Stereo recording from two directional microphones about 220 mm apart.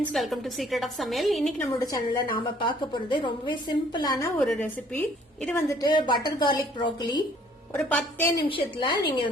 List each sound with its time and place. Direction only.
0.1 s a woman's voice: centre (ahead or behind)
1.8 s a woman's voice: 15° left (ahead or behind)
4.4 s a woman's voice: 5° left (ahead or behind)
5.6 s a woman's voice: 20° left (ahead or behind)
7.7 s a woman's voice: 5° left (ahead or behind)
8.4 s a woman's voice: 25° left (ahead or behind)